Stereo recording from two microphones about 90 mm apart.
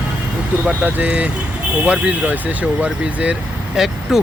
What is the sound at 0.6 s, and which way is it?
Speech, 15° right (ahead or behind).